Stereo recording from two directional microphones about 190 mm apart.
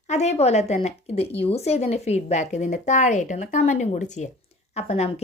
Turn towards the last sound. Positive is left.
turn(degrees=35)  # may be behind; listen again after turning